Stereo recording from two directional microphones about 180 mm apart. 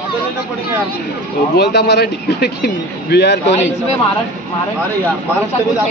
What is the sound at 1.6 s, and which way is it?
A man's voice, 65° left (ahead or behind).